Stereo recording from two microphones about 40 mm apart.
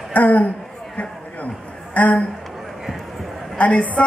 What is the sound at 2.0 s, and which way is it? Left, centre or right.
Speech, left.